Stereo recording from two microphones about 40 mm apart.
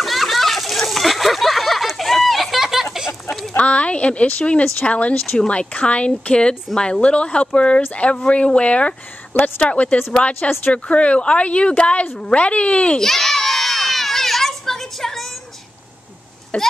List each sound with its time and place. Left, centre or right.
0.0 s splash: centre
2.6 s a sound: centre
3.5 s a woman's voice: left
13.0 s crowd: centre
16.5 s speech: left